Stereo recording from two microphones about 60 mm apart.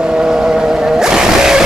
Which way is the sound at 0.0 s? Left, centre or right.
Centre.